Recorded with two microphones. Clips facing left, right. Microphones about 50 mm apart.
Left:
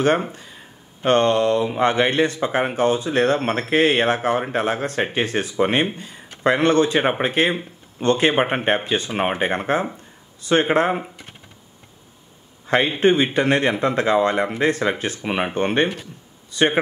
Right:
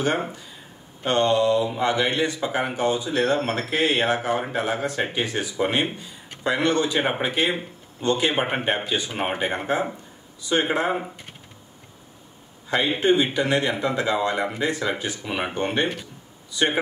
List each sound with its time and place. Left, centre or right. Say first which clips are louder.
0.0 s mantra: left 5 dB; left
1.8 s speech: left 4 dB; left
10.4 s mantra: left 5 dB; left
12.6 s speech: left 4 dB; left